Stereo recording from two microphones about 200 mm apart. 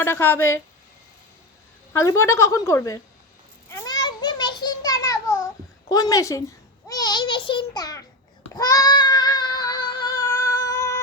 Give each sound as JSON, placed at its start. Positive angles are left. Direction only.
{"t": 0.0, "sound": "a woman's voice", "side_deg": 10}
{"t": 1.9, "sound": "a woman's voice", "side_deg": 15}
{"t": 3.7, "sound": "a sound", "side_deg": 15}
{"t": 4.0, "sound": "children playing", "side_deg": 20}
{"t": 5.9, "sound": "a woman's voice", "side_deg": 20}
{"t": 6.8, "sound": "babbling", "side_deg": 20}
{"t": 8.5, "sound": "a sound", "side_deg": 15}